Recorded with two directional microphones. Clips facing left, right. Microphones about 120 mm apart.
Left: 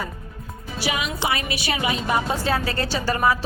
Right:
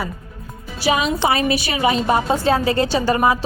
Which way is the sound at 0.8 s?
30° right (ahead or behind).